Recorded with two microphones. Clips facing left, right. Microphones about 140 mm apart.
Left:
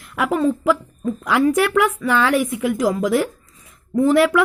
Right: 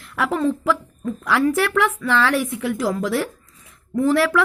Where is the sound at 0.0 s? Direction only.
10° left (ahead or behind).